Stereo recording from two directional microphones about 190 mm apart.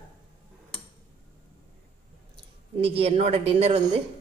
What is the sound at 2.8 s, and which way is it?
A woman's voice, 30° right (ahead or behind).